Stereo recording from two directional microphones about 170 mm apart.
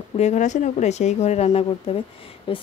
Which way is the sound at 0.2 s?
45° left (ahead or behind).